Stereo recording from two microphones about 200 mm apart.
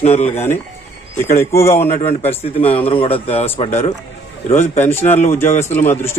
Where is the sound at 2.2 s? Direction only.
30° left (ahead or behind).